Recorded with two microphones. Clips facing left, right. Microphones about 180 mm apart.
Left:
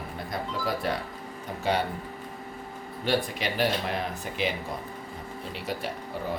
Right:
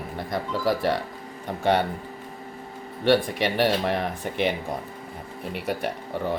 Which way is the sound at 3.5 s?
65° right (ahead or behind).